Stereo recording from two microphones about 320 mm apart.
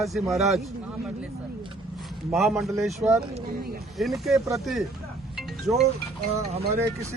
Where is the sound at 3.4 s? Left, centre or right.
Right.